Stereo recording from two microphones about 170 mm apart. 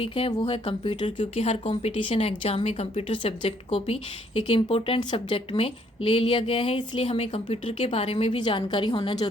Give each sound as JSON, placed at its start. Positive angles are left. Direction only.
{"t": 0.0, "sound": "a woman's voice", "side_deg": 30}